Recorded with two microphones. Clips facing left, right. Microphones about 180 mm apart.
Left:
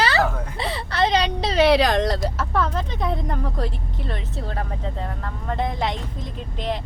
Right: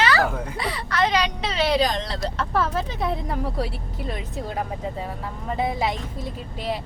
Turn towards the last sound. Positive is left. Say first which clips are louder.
# even
turn(degrees=-10)  # may be behind; listen again after turning